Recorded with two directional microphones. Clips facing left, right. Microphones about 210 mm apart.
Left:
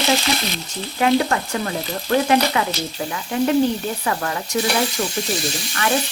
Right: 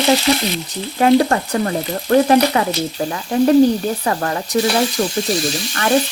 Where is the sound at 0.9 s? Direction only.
40° right (ahead or behind).